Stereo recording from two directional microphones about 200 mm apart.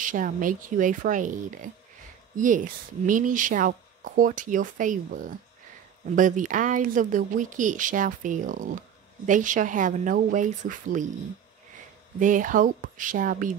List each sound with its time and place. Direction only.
0.0 s speech: 40° right (ahead or behind)
12.2 s speech: 40° right (ahead or behind)